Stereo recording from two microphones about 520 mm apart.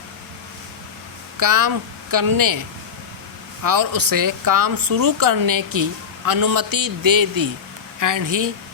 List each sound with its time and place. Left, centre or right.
1.4 s speech: right
3.6 s speech: right